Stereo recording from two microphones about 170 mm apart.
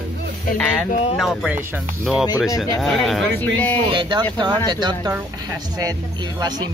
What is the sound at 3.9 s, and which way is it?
Speech, 30° right (ahead or behind).